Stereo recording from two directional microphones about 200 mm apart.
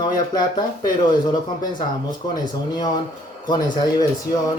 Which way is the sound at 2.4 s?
20° left (ahead or behind).